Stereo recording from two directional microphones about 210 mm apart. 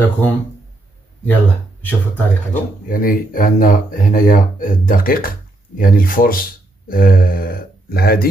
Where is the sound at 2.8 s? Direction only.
40° left (ahead or behind).